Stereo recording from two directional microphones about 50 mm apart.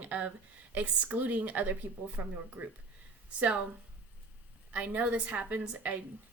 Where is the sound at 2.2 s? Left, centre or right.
Right.